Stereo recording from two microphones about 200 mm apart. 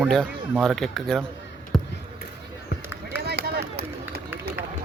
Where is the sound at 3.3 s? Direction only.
55° right (ahead or behind).